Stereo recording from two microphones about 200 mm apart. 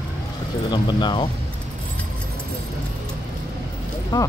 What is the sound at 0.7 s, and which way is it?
Speech, 20° left (ahead or behind).